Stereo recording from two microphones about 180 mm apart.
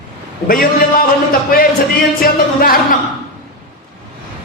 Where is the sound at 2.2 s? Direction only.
55° left (ahead or behind).